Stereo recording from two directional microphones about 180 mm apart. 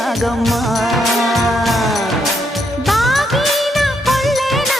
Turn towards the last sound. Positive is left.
turn(degrees=0)  # may be behind; listen again after turning